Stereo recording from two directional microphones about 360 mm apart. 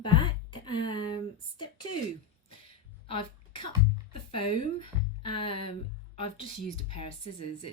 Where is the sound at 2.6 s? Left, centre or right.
Left.